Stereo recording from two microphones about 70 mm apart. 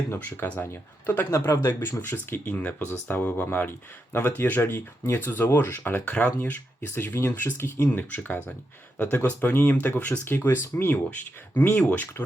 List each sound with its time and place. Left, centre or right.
0.2 s speech: left
7.1 s speech: left